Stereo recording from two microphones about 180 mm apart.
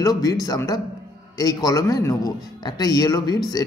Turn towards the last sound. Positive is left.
turn(degrees=20)  # may be behind; listen again after turning